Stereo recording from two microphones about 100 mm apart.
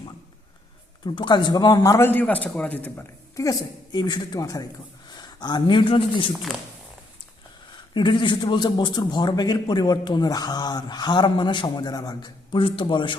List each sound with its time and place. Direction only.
1.0 s a man's voice: 50° left (ahead or behind)
2.0 s a man's voice: 20° left (ahead or behind)
3.3 s speech: 35° left (ahead or behind)
3.9 s a man's voice: 50° left (ahead or behind)
7.9 s a man's voice: 55° left (ahead or behind)